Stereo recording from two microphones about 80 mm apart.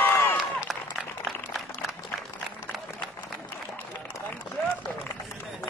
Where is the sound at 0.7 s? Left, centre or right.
Centre.